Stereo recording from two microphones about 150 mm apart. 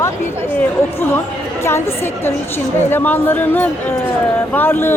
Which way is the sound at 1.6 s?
15° left (ahead or behind).